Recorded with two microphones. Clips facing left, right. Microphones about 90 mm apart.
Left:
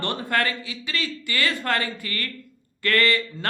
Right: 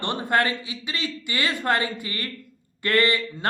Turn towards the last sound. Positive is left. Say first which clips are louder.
# even
turn(degrees=-20)  # may be behind; listen again after turning